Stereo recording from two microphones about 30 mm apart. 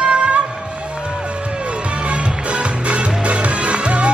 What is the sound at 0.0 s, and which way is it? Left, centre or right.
Music, right.